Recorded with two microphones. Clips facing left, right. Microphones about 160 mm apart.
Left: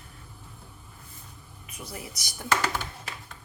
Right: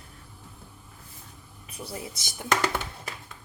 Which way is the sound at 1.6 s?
30° right (ahead or behind).